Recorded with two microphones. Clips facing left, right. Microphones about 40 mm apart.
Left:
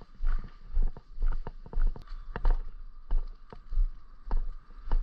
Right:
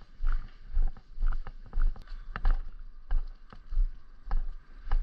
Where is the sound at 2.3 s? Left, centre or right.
Right.